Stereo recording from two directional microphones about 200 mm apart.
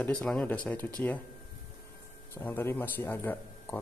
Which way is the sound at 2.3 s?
10° left (ahead or behind).